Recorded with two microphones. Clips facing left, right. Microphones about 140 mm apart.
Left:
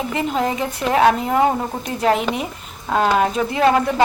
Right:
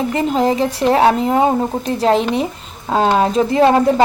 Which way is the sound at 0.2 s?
30° right (ahead or behind).